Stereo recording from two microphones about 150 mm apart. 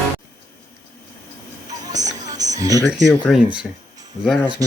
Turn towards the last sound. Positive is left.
turn(degrees=-25)  # may be behind; listen again after turning